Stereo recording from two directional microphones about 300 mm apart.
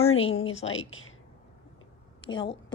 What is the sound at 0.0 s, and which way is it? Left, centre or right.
A woman's voice, left.